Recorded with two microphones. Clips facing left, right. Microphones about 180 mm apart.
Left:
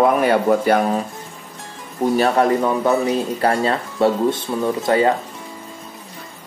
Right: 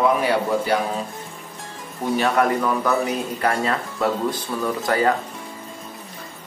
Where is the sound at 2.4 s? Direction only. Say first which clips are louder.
Left 3 dB; 25° left (ahead or behind).